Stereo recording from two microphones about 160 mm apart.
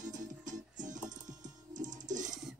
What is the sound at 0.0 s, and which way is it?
Music, 50° right (ahead or behind).